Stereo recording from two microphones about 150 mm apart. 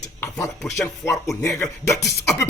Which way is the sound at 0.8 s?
20° left (ahead or behind).